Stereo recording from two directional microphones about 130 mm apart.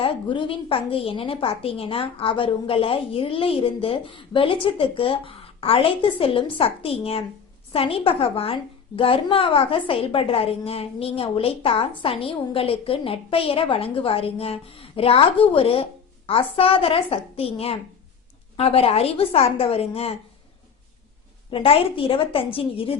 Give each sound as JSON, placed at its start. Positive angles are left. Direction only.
{"t": 0.0, "sound": "a woman's voice", "side_deg": 40}
{"t": 21.5, "sound": "a woman's voice", "side_deg": 45}